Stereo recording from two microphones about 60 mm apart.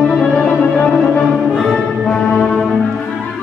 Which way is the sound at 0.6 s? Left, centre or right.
Left.